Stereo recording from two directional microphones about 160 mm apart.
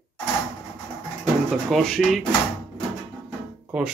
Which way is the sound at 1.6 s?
Centre (ahead or behind).